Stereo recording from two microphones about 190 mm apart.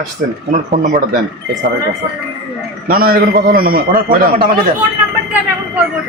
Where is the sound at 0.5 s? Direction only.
40° right (ahead or behind).